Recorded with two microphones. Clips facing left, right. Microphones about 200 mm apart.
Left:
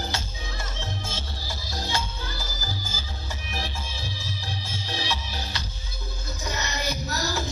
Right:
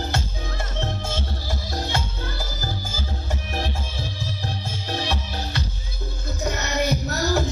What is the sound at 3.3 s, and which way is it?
Music, 55° right (ahead or behind).